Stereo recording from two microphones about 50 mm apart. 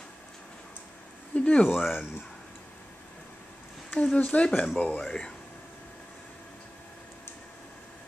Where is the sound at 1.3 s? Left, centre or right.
Left.